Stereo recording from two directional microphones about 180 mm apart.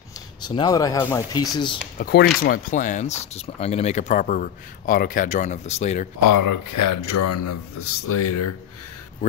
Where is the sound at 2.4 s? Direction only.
50° left (ahead or behind).